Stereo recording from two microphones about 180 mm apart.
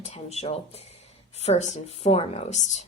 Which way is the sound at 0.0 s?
35° left (ahead or behind).